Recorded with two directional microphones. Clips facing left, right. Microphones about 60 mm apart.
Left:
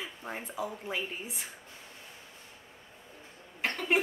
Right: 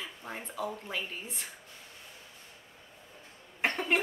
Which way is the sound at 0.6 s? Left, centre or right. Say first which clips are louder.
Even; centre.